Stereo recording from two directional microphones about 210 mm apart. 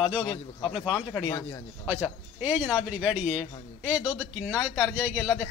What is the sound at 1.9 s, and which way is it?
A man's voice, 5° right (ahead or behind).